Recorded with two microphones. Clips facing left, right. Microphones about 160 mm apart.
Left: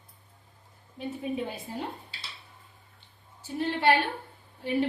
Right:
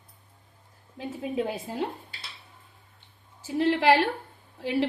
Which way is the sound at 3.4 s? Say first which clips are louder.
Right 5 dB; 90° right.